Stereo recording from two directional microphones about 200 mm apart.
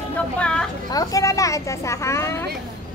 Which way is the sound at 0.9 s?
15° left (ahead or behind).